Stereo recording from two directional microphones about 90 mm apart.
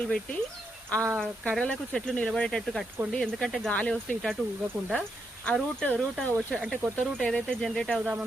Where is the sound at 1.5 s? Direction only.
10° left (ahead or behind).